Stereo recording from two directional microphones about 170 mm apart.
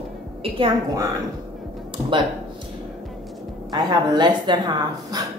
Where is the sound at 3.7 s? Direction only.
25° right (ahead or behind).